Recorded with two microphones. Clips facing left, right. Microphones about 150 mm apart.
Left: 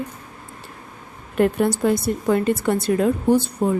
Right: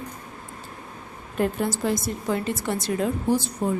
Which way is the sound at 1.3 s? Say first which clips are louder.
Left 6 dB; 65° left (ahead or behind).